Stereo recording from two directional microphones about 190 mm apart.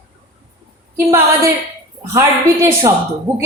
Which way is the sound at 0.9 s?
15° right (ahead or behind).